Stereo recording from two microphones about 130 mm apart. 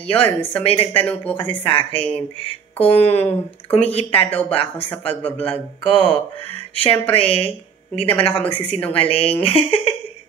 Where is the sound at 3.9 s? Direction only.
50° left (ahead or behind).